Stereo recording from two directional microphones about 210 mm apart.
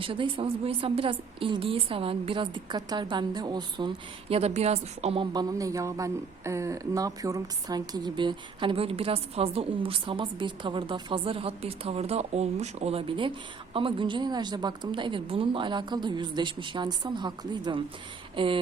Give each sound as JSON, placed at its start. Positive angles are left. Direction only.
{"t": 0.0, "sound": "a woman's voice", "side_deg": -25}